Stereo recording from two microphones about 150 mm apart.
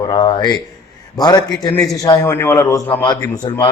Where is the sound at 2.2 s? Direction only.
15° left (ahead or behind).